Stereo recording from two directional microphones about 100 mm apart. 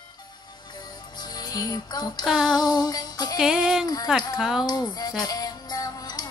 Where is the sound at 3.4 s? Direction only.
5° right (ahead or behind).